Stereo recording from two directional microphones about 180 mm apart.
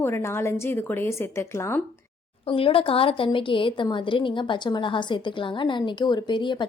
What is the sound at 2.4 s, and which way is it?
Speech, 30° left (ahead or behind).